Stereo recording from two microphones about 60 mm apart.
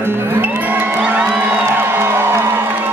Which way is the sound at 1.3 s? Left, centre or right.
Right.